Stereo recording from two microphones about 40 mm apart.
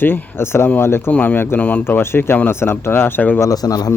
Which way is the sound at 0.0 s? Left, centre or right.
Left.